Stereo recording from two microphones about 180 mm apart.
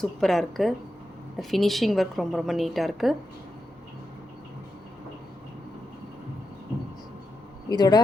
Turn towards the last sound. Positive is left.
turn(degrees=20)  # may be behind; listen again after turning